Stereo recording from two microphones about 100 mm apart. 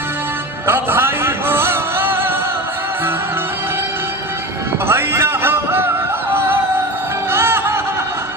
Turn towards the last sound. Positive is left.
turn(degrees=-25)  # may be behind; listen again after turning